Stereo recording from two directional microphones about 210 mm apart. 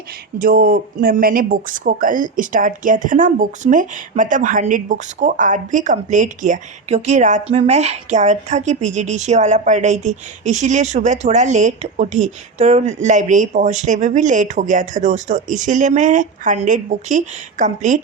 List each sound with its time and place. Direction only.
0.3 s a woman's voice: 40° right (ahead or behind)